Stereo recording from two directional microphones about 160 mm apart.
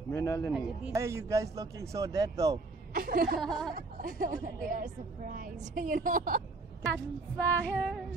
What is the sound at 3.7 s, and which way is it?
A woman's voice, 60° right (ahead or behind).